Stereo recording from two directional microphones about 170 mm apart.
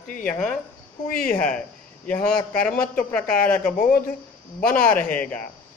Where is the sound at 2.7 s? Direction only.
55° left (ahead or behind).